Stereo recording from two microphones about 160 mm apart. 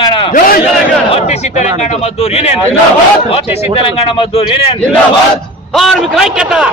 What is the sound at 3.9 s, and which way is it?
Speech, 35° left (ahead or behind).